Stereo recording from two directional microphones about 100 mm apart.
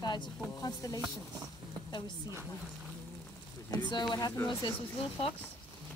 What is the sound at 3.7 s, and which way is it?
Speech, 45° left (ahead or behind).